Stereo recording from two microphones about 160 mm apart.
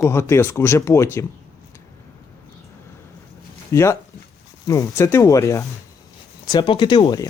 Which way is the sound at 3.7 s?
15° left (ahead or behind).